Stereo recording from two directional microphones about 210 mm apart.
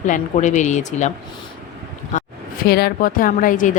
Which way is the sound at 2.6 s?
50° left (ahead or behind).